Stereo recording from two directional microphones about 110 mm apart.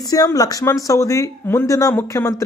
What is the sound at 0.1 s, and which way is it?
Speech, 35° left (ahead or behind).